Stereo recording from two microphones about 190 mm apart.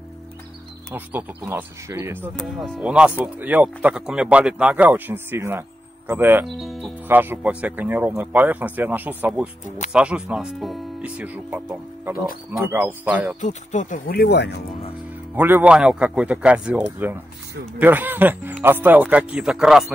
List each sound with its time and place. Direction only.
0.9 s speech: 10° right (ahead or behind)
2.3 s speech: centre (ahead or behind)
6.4 s speech: centre (ahead or behind)
13.4 s speech: 40° left (ahead or behind); by 14.6 s 60° left (ahead or behind)
15.3 s speech: 10° right (ahead or behind)